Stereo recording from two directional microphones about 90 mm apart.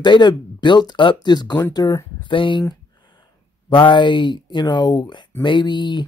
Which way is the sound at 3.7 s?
60° left (ahead or behind).